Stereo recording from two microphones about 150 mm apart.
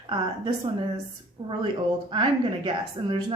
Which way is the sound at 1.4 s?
35° right (ahead or behind).